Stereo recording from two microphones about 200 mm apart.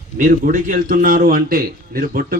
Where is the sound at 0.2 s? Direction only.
40° right (ahead or behind).